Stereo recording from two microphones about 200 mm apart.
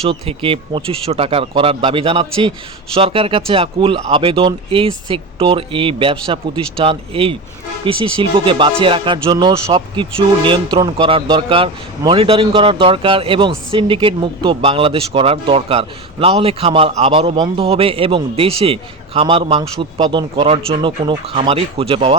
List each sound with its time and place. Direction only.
0.0 s speech: 30° right (ahead or behind)